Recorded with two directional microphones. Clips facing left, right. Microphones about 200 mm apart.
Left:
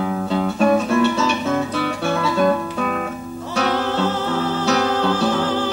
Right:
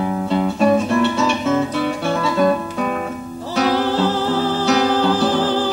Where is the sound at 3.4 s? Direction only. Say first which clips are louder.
Right 3 dB; 35° right (ahead or behind).